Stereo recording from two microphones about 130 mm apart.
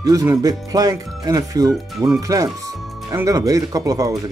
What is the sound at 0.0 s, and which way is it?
Speech, 25° right (ahead or behind).